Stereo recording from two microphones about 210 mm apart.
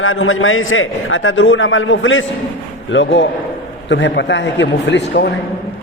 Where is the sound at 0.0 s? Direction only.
75° left (ahead or behind).